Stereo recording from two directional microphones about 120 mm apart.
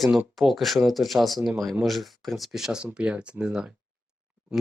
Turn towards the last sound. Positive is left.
turn(degrees=-10)  # may be behind; listen again after turning